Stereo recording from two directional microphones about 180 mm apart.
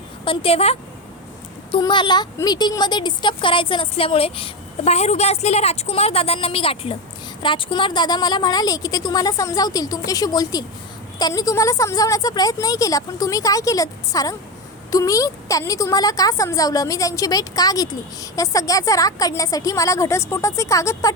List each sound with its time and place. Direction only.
0.3 s a woman's voice: 30° left (ahead or behind)